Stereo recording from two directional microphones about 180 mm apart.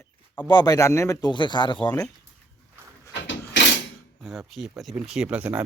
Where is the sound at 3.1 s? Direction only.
80° left.